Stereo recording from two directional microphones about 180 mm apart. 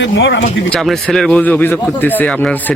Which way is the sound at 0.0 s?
80° left.